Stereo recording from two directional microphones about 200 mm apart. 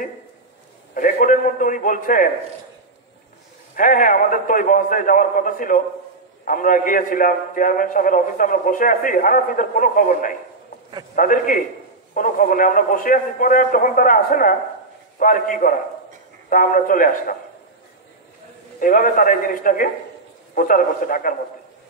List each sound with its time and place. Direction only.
0.9 s a man's voice: 40° left (ahead or behind)
3.7 s a man's voice: 40° left (ahead or behind)
18.8 s a man's voice: 45° left (ahead or behind)